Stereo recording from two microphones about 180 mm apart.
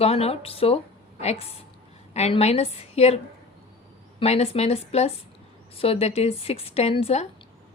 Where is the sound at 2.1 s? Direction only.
35° left (ahead or behind).